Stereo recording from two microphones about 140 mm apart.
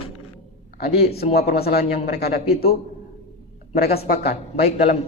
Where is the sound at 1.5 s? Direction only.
90° left.